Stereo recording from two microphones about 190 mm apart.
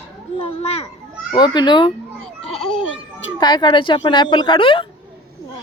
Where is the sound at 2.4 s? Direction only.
5° left (ahead or behind).